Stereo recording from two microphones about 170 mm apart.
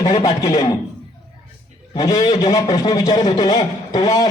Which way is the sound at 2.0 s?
25° left (ahead or behind).